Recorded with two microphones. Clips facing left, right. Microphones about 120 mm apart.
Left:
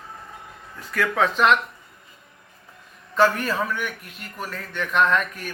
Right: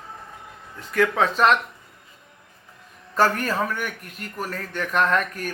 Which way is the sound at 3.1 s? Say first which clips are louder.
Left 1 dB; 45° right (ahead or behind).